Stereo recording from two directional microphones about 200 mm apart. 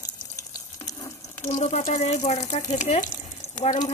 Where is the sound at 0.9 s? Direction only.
15° left (ahead or behind).